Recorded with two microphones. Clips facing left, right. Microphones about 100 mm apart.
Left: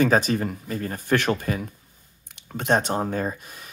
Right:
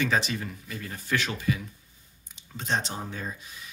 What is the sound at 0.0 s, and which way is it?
Speech, 45° left (ahead or behind).